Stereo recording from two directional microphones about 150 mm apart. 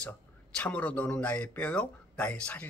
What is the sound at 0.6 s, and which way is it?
Speech, 10° left (ahead or behind).